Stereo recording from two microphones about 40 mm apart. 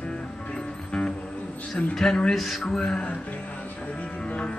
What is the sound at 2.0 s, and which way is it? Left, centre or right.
Male singing, centre.